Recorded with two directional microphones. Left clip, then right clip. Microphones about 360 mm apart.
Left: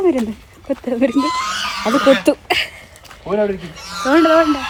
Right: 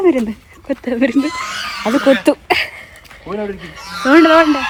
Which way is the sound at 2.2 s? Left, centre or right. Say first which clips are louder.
Right 2 dB; centre.